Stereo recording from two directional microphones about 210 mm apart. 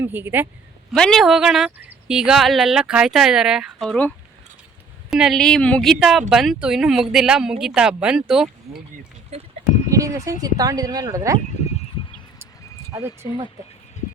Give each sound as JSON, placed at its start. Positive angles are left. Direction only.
{"t": 0.0, "sound": "speech", "side_deg": -10}
{"t": 0.9, "sound": "speech", "side_deg": 0}
{"t": 5.1, "sound": "speech", "side_deg": 0}
{"t": 9.9, "sound": "speech", "side_deg": -15}
{"t": 12.9, "sound": "speech", "side_deg": -10}